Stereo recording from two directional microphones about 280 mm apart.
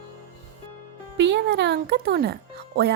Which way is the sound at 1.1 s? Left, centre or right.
Right.